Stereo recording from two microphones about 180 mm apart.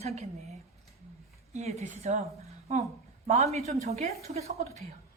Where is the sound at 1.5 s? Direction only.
35° right (ahead or behind).